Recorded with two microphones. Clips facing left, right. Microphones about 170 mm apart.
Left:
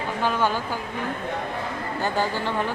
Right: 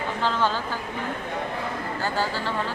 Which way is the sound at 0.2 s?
15° left (ahead or behind).